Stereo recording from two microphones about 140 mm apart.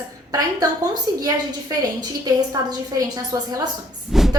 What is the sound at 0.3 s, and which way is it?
Speech, 25° right (ahead or behind).